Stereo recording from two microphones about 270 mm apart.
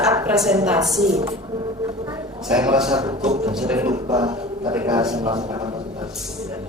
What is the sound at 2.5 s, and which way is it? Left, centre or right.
Speech, centre.